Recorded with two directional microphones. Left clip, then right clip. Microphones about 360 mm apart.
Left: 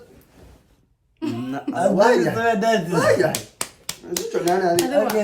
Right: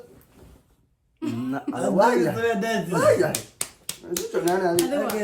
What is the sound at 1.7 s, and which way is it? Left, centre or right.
A man's voice, centre.